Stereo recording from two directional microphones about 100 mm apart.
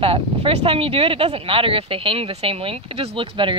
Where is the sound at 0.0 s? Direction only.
65° right (ahead or behind).